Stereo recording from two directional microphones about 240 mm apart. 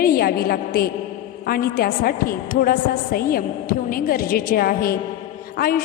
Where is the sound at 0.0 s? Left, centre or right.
Left.